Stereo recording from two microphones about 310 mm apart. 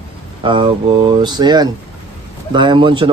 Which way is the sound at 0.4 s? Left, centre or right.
Centre.